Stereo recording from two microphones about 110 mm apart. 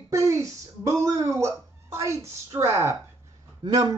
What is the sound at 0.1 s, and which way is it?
Speech, 25° right (ahead or behind).